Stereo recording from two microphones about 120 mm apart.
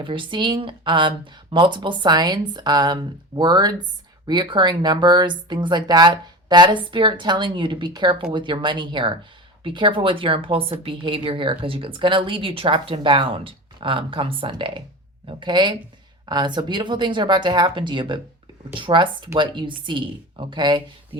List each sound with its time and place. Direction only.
0.0 s a woman's voice: 45° right (ahead or behind)